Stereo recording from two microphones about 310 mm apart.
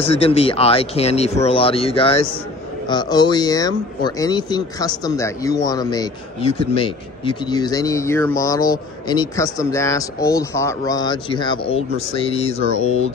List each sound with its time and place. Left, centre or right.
0.0 s speech: centre